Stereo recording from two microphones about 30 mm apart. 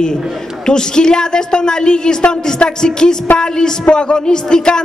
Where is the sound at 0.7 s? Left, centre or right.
Left.